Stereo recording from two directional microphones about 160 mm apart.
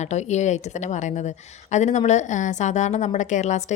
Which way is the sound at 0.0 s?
45° left (ahead or behind).